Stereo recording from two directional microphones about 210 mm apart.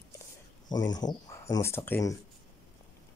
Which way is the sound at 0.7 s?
20° left (ahead or behind).